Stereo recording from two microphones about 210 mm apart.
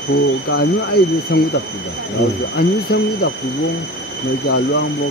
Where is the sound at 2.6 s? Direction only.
50° left (ahead or behind).